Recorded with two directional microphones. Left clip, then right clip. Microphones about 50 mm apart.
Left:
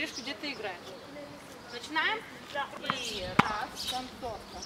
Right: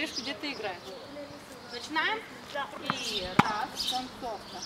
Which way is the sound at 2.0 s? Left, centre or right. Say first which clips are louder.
Even; centre.